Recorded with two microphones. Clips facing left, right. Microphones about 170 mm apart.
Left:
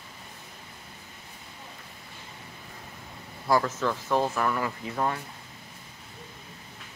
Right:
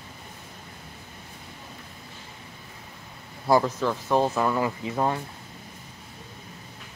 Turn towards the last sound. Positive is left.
turn(degrees=-20)  # may be behind; listen again after turning